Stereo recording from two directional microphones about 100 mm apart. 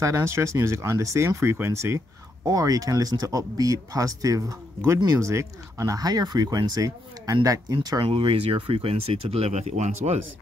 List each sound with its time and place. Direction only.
0.0 s speech: 25° right (ahead or behind)
2.4 s speech: 35° right (ahead or behind)
8.0 s speech: 65° right (ahead or behind); by 10.2 s 90° right